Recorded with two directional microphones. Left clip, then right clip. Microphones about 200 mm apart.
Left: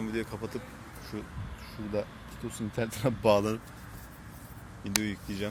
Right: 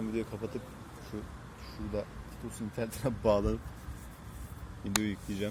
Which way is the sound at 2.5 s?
45° left (ahead or behind).